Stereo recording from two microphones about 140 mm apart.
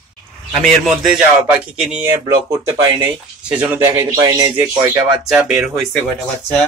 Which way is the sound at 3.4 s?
10° right (ahead or behind).